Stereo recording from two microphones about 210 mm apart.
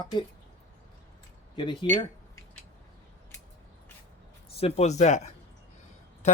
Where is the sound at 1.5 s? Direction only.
20° left (ahead or behind).